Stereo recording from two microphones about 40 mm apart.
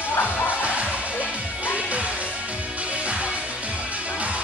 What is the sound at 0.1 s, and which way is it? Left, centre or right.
Music, left.